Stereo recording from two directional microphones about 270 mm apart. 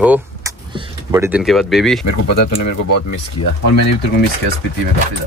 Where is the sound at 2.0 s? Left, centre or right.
Left.